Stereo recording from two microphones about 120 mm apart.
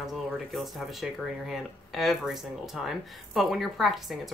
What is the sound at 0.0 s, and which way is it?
Speech, centre (ahead or behind).